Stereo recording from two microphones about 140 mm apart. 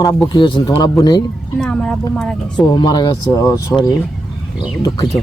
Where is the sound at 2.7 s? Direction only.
30° left (ahead or behind).